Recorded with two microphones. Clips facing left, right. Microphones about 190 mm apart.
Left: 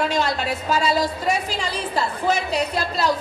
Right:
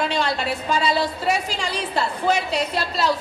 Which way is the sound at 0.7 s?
10° left (ahead or behind).